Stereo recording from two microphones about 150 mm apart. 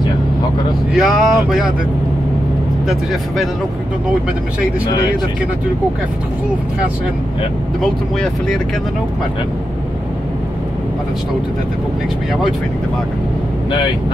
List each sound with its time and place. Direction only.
0.9 s speech: 5° right (ahead or behind)
2.9 s speech: centre (ahead or behind)